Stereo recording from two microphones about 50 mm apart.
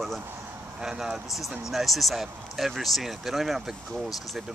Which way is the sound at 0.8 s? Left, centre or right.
Centre.